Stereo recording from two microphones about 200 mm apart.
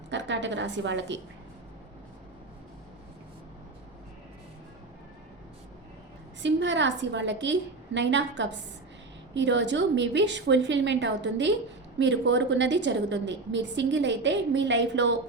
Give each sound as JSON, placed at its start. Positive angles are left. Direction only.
{"t": 0.1, "sound": "a woman's voice", "side_deg": -65}
{"t": 6.4, "sound": "a woman's voice", "side_deg": -65}